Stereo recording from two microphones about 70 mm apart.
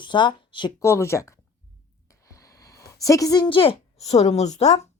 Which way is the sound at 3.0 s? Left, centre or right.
Left.